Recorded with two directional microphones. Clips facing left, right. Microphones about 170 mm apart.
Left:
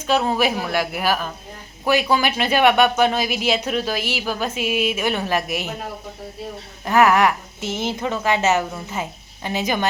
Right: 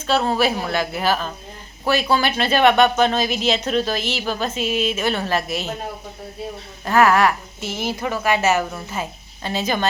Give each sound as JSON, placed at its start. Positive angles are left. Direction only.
{"t": 0.1, "sound": "speech", "side_deg": 15}
{"t": 6.8, "sound": "a woman's voice", "side_deg": 15}